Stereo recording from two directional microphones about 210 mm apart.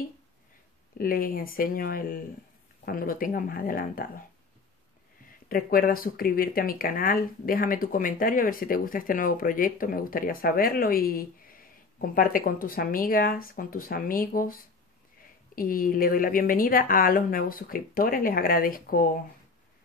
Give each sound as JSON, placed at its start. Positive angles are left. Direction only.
{"t": 0.9, "sound": "speech", "side_deg": 45}
{"t": 5.5, "sound": "speech", "side_deg": 45}